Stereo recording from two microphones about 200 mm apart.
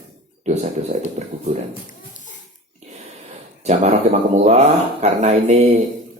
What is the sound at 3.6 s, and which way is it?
Speech, 35° right (ahead or behind).